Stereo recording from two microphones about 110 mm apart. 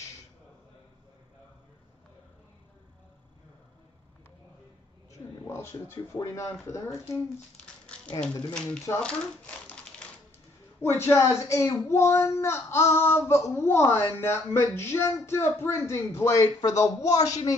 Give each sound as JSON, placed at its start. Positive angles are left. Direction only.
{"t": 5.1, "sound": "a sound", "side_deg": 25}
{"t": 6.1, "sound": "speech", "side_deg": 30}
{"t": 8.9, "sound": "speech", "side_deg": 35}
{"t": 9.7, "sound": "typewriter", "side_deg": 10}
{"t": 10.8, "sound": "speech", "side_deg": 20}